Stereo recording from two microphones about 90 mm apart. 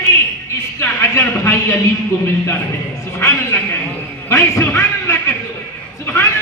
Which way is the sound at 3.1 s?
30° left (ahead or behind).